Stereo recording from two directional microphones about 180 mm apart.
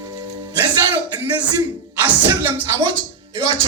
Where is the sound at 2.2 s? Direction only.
15° right (ahead or behind).